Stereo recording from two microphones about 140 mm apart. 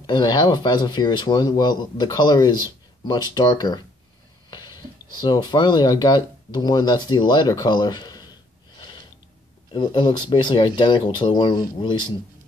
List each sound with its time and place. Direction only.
0.0 s speech: 30° left (ahead or behind)